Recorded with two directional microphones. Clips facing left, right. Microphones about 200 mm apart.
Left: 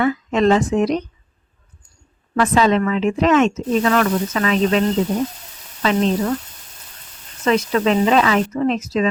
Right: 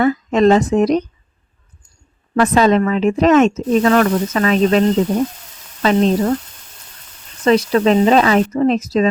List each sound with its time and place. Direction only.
0.0 s speech: 40° right (ahead or behind)
2.3 s speech: 40° right (ahead or behind)
5.8 s speech: 40° right (ahead or behind)
7.4 s speech: 35° right (ahead or behind)